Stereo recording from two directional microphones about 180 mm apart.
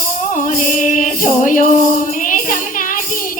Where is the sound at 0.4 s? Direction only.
45° left (ahead or behind).